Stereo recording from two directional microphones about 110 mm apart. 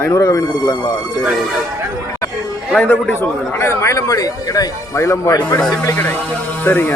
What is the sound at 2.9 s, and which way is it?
A man's voice, 20° left (ahead or behind).